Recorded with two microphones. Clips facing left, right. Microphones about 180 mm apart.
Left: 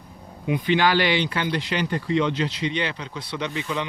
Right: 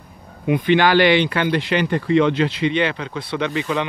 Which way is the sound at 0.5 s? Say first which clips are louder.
Right 5 dB; 65° right (ahead or behind).